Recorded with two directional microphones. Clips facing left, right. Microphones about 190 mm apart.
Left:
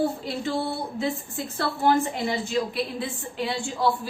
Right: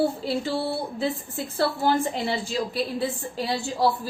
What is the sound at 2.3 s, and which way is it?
A woman's voice, 35° right (ahead or behind).